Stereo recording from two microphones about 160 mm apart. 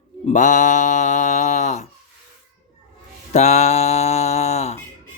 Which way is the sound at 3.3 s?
45° left (ahead or behind).